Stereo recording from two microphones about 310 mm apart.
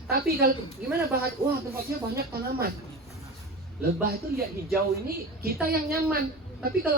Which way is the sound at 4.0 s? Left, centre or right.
Right.